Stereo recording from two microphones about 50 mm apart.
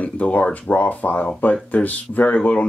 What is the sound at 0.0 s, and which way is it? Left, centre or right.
Speech, left.